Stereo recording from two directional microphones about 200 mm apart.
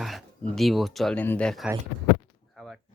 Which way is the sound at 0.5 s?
Centre (ahead or behind).